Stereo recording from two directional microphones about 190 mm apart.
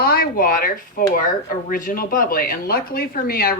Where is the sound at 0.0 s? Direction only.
50° left (ahead or behind).